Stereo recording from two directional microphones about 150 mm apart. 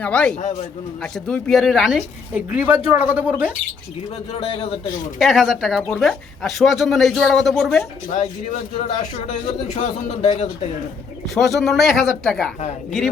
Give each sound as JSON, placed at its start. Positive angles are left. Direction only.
{"t": 0.0, "sound": "a man's voice", "side_deg": 10}
{"t": 4.4, "sound": "a man's voice", "side_deg": 40}
{"t": 5.2, "sound": "speech", "side_deg": 0}
{"t": 8.1, "sound": "a man's voice", "side_deg": 50}
{"t": 11.3, "sound": "speech", "side_deg": 0}